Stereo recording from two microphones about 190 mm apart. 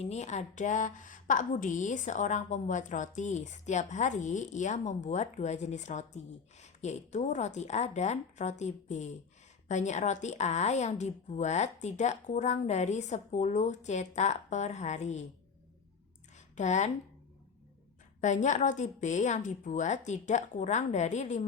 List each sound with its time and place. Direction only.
0.0 s a woman's voice: 35° left (ahead or behind)
16.6 s a woman's voice: 40° left (ahead or behind)
18.2 s a woman's voice: 40° left (ahead or behind)